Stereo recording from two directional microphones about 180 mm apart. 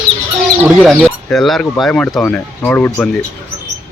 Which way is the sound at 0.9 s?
5° left (ahead or behind).